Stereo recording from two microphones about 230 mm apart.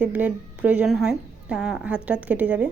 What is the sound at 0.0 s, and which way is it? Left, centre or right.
A woman's voice, centre.